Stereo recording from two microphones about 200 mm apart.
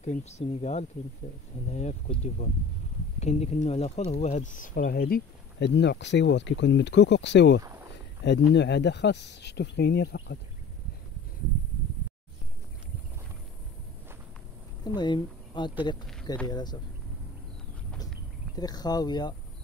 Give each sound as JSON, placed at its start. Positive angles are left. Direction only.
{"t": 0.0, "sound": "speech", "side_deg": 35}
{"t": 15.0, "sound": "speech", "side_deg": 20}
{"t": 18.6, "sound": "speech", "side_deg": 20}